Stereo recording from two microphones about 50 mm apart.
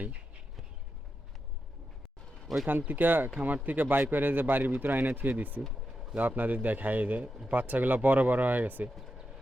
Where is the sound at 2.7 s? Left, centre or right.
Right.